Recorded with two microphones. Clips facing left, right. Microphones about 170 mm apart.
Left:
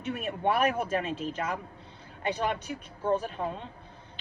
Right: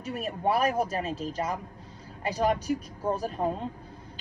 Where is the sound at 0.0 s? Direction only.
35° right (ahead or behind).